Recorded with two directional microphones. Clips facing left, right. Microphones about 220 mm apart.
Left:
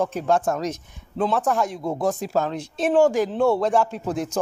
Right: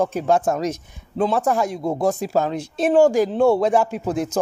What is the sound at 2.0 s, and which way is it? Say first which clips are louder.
Speech: right 2 dB; centre (ahead or behind).